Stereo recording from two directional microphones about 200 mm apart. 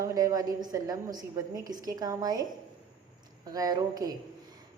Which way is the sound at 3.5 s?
20° right (ahead or behind).